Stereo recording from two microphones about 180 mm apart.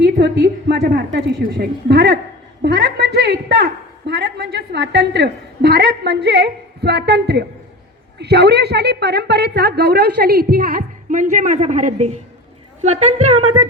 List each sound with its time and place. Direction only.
0.0 s a woman's voice: 70° right (ahead or behind); by 13.4 s 40° right (ahead or behind)